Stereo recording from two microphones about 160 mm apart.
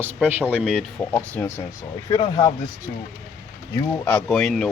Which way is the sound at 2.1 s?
30° left (ahead or behind).